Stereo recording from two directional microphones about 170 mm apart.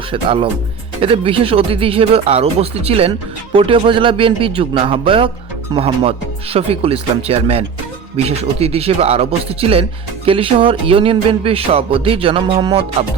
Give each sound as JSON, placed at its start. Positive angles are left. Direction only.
{"t": 0.1, "sound": "music", "side_deg": -30}